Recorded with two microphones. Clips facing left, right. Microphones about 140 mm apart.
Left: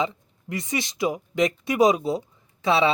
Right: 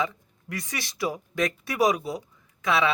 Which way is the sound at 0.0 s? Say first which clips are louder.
Left 2 dB; 25° left (ahead or behind).